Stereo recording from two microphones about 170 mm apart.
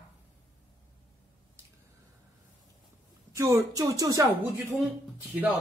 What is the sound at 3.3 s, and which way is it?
Speech, 20° right (ahead or behind).